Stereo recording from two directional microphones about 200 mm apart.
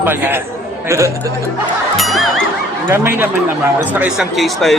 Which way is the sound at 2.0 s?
Centre (ahead or behind).